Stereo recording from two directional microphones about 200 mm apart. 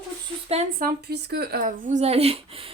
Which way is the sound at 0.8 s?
50° right (ahead or behind).